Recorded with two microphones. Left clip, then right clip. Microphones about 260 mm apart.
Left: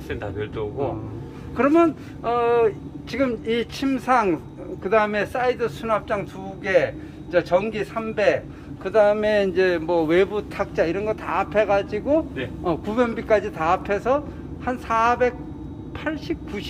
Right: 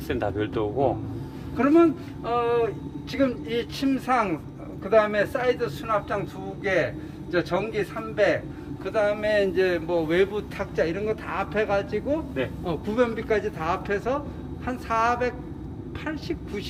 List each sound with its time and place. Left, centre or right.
0.1 s speech: right
1.5 s speech: centre
7.3 s speech: centre